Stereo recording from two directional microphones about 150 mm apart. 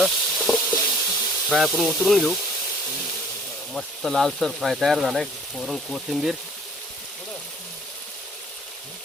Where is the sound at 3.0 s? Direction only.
5° left (ahead or behind).